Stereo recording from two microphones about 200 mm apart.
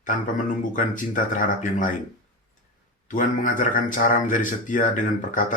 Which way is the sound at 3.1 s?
40° left (ahead or behind).